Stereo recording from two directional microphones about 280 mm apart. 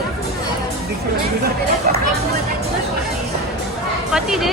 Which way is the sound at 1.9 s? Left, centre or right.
Right.